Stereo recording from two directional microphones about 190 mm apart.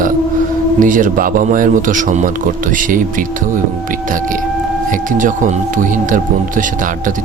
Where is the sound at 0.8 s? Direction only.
45° right (ahead or behind).